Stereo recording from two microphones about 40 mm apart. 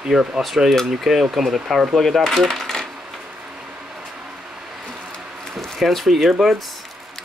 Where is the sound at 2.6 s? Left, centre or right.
Centre.